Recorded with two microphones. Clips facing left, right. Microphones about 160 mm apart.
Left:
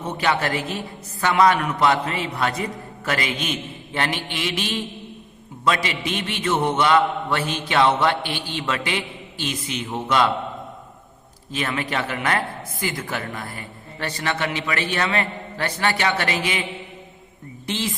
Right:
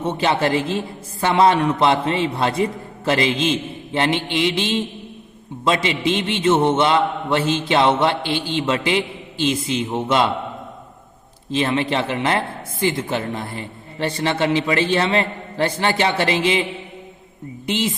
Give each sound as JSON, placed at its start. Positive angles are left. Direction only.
{"t": 0.0, "sound": "speech", "side_deg": -25}
{"t": 11.5, "sound": "speech", "side_deg": -25}
{"t": 17.7, "sound": "speech", "side_deg": -20}